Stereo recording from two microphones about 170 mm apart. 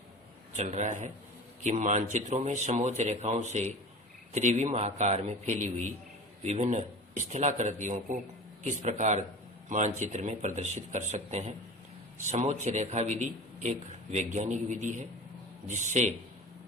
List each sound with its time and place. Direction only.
0.5 s a man's voice: 40° right (ahead or behind)